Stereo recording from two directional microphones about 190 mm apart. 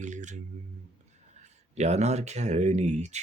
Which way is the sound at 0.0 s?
40° right (ahead or behind).